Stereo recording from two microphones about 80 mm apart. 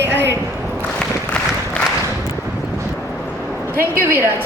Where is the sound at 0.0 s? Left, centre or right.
Right.